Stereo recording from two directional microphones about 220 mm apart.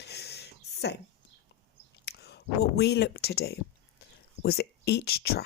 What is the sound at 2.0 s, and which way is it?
Speech, 50° left (ahead or behind).